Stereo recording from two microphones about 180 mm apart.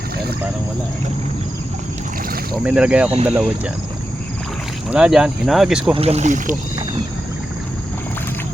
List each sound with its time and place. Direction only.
2.6 s speech: 5° right (ahead or behind)
4.9 s speech: 5° right (ahead or behind)
5.9 s speech: 35° right (ahead or behind)